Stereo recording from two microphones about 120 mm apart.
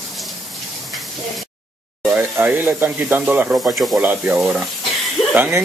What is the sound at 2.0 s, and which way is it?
Sizzle, 5° right (ahead or behind).